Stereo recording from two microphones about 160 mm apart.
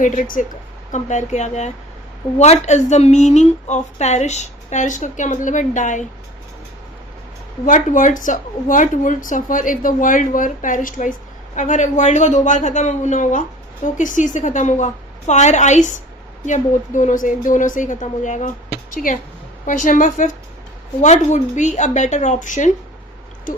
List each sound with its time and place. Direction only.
0.0 s a woman's voice: 55° left (ahead or behind)
7.6 s a woman's voice: 55° left (ahead or behind)
19.6 s a woman's voice: 55° left (ahead or behind)